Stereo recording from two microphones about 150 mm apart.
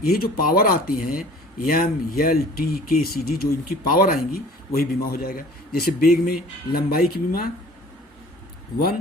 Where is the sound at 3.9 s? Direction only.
75° left (ahead or behind).